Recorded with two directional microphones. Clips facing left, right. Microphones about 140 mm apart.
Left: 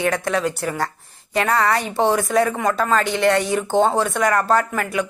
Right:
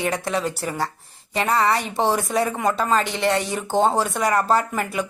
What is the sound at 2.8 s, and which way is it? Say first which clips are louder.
Speech: left 2 dB; 25° right (ahead or behind).